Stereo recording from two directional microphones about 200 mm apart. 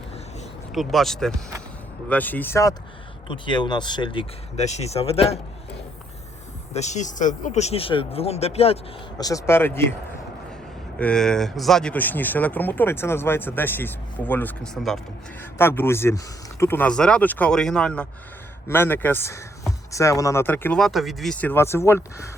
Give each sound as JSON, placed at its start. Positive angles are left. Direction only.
{"t": 0.7, "sound": "speech", "side_deg": 0}
{"t": 6.7, "sound": "speech", "side_deg": 35}
{"t": 9.1, "sound": "speech", "side_deg": 15}
{"t": 10.9, "sound": "speech", "side_deg": 5}